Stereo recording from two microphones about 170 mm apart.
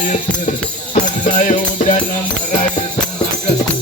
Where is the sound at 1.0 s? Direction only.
45° left (ahead or behind).